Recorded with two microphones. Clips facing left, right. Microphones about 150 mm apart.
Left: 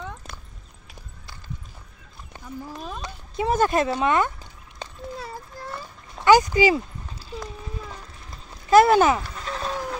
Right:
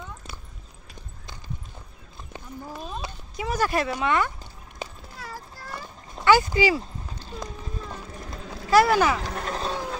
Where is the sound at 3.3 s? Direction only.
25° left (ahead or behind).